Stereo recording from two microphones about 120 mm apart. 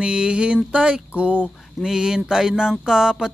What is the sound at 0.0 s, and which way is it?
Speech, 5° right (ahead or behind).